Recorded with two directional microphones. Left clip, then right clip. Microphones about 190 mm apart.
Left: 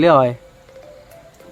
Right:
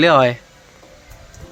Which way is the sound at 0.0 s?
Centre (ahead or behind).